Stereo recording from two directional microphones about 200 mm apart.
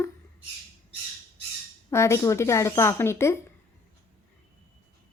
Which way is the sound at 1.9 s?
15° left (ahead or behind).